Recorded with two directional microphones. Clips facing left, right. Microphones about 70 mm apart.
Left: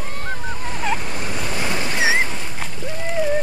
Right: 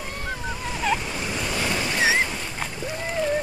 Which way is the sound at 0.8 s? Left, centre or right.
Centre.